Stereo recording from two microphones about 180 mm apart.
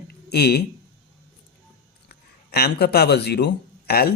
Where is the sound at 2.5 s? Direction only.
65° left (ahead or behind).